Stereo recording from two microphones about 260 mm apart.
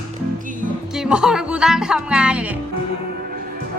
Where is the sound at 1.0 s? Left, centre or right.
Centre.